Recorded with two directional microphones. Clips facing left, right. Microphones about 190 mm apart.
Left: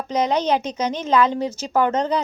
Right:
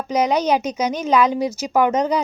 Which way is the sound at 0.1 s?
10° right (ahead or behind).